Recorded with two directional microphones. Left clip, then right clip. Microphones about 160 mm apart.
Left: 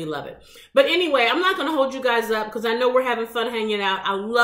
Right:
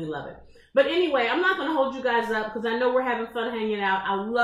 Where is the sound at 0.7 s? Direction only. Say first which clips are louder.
Left 4 dB; 10° left (ahead or behind).